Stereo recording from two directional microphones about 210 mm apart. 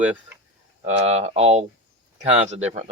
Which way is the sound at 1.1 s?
30° right (ahead or behind).